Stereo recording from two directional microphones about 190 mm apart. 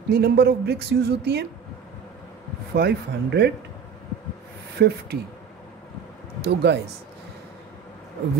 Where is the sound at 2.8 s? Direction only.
60° right (ahead or behind).